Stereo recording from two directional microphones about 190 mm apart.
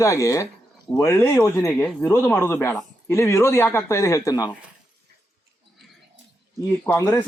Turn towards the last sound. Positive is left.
turn(degrees=10)  # may be behind; listen again after turning